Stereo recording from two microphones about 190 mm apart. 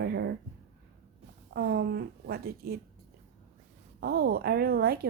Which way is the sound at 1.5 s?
55° right (ahead or behind).